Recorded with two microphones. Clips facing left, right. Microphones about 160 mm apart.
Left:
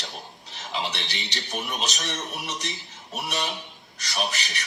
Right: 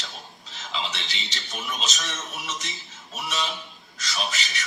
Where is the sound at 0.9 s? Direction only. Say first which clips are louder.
Left 2 dB; 65° left (ahead or behind).